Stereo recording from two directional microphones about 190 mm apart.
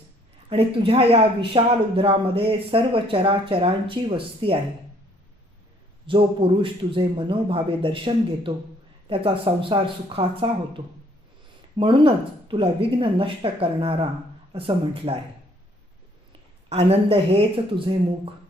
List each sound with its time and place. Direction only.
0.5 s speech: 30° right (ahead or behind)
6.1 s speech: 25° right (ahead or behind)
16.6 s speech: 30° right (ahead or behind)